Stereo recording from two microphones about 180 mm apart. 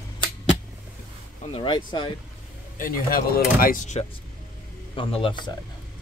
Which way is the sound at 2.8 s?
55° left (ahead or behind).